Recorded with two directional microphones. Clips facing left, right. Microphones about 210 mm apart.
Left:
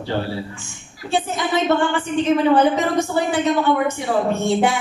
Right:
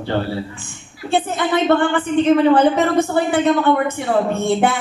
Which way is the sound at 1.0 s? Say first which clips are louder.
Right 3 dB; 55° right (ahead or behind).